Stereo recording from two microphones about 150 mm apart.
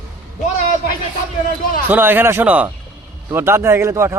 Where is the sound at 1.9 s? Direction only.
10° right (ahead or behind).